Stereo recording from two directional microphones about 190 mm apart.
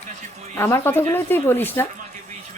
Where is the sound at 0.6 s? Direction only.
15° left (ahead or behind).